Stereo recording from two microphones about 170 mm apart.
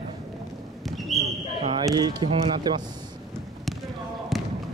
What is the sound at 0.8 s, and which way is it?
Basketball bounce, centre (ahead or behind).